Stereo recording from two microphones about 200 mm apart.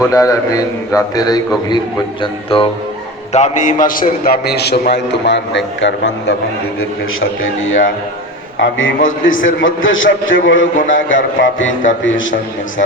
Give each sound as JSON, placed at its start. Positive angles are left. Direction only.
{"t": 0.1, "sound": "a man's voice", "side_deg": 15}
{"t": 3.3, "sound": "a man's voice", "side_deg": 35}
{"t": 7.4, "sound": "a man's voice", "side_deg": 80}